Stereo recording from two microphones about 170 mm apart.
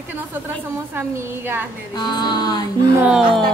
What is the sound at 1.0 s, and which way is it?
Speech, 10° right (ahead or behind).